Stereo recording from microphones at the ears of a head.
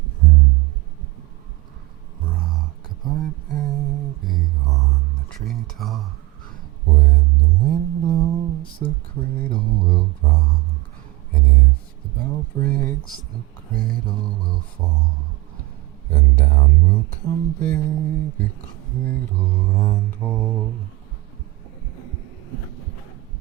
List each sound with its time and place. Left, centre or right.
0.0 s music: right
2.2 s a sound: right
21.9 s heart sounds: right